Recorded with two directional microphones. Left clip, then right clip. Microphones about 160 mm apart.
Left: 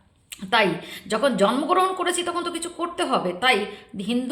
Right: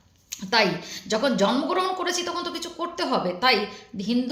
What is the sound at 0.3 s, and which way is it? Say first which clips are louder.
A woman's voice: left 1 dB; 20° left (ahead or behind).